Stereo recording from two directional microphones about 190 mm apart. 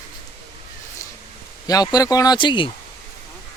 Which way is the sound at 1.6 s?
20° left (ahead or behind).